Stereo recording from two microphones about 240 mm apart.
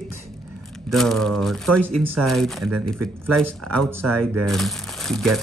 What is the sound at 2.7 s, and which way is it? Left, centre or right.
Speech, right.